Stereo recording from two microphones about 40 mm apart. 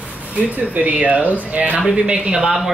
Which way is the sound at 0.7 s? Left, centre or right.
Right.